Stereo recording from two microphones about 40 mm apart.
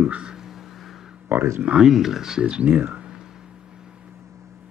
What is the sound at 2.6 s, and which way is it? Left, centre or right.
Speech, right.